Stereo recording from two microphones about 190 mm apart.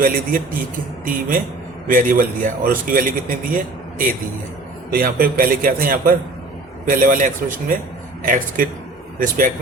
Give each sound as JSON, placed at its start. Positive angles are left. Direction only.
{"t": 0.0, "sound": "a man's voice", "side_deg": -45}